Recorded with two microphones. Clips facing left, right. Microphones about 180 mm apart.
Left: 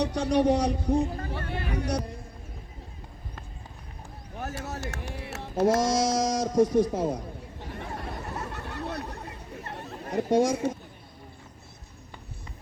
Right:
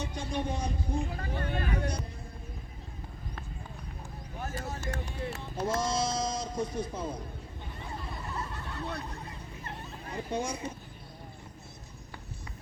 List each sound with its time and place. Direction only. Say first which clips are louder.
0.0 s a man's voice: left 11 dB; 75° left (ahead or behind)
4.4 s a man's voice: left 2 dB; 75° left (ahead or behind); by 7.2 s 90° left
7.6 s a sound: left 6 dB; 70° left (ahead or behind)
9.8 s speech: left 11 dB; 75° left (ahead or behind)